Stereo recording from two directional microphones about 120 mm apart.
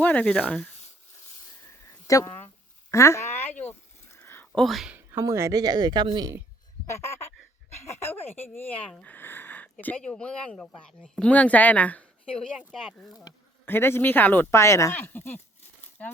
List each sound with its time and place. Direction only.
0.0 s speech: 10° left (ahead or behind)
1.9 s a sound: 25° left (ahead or behind)
2.9 s speech: 25° left (ahead or behind)
3.6 s a sound: 15° left (ahead or behind)
4.6 s speech: centre (ahead or behind)
4.9 s speech: 20° right (ahead or behind); by 6.3 s 35° right (ahead or behind)
8.5 s speech: 15° left (ahead or behind)
8.9 s a sound: 10° left (ahead or behind)
9.8 s speech: 10° left (ahead or behind)
12.5 s speech: 5° right (ahead or behind)
13.7 s speech: 20° left (ahead or behind)